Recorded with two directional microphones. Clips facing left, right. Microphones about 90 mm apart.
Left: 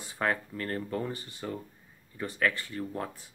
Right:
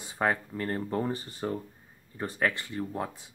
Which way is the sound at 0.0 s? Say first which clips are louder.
Right 2 dB; 15° right (ahead or behind).